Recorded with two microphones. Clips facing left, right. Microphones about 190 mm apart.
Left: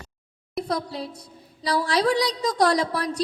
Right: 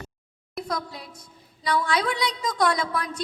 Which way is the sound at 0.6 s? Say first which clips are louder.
Left 4 dB; 30° left (ahead or behind).